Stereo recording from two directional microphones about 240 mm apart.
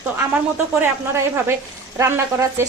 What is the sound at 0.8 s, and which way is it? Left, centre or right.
A woman's voice, centre.